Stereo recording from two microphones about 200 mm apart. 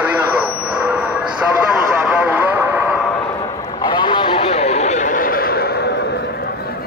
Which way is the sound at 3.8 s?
25° left (ahead or behind).